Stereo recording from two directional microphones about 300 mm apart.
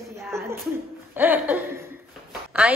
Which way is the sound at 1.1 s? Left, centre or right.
Centre.